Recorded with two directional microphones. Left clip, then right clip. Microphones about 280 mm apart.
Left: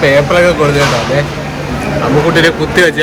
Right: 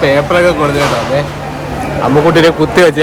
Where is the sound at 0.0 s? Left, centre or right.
Centre.